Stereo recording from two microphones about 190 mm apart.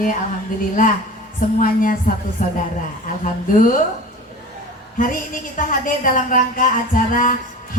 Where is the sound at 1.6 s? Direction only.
45° left (ahead or behind).